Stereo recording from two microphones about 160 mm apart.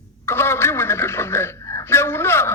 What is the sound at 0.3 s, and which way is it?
Speech, 15° left (ahead or behind).